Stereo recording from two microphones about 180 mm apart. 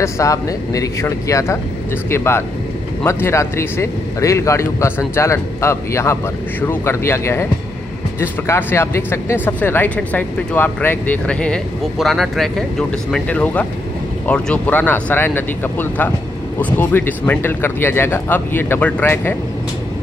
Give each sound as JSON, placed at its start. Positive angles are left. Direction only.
{"t": 0.0, "sound": "speech", "side_deg": 20}